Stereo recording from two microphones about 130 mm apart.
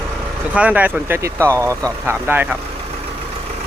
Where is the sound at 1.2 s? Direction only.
25° right (ahead or behind).